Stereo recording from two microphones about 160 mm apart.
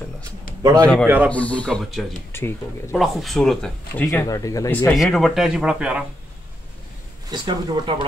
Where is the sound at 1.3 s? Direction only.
10° left (ahead or behind).